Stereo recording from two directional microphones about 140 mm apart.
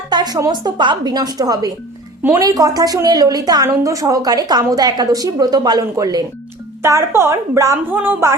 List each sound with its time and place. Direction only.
0.1 s a woman's voice: 30° right (ahead or behind)
6.8 s a woman's voice: 20° right (ahead or behind)